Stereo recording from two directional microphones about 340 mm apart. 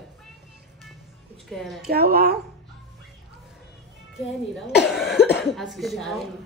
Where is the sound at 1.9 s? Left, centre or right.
Right.